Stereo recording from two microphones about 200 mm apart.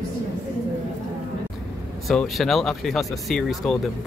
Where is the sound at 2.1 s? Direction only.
Centre (ahead or behind).